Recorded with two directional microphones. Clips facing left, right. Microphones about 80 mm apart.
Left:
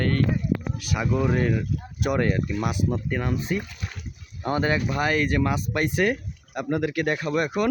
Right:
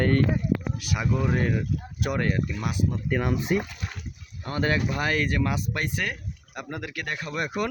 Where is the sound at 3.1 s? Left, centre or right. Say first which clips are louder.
Right 1 dB; centre.